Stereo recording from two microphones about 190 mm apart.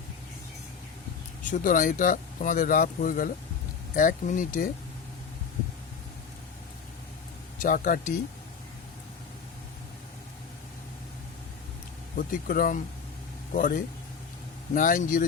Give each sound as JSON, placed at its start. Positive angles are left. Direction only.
{"t": 1.5, "sound": "speech", "side_deg": 45}
{"t": 7.6, "sound": "speech", "side_deg": 45}
{"t": 12.1, "sound": "speech", "side_deg": 50}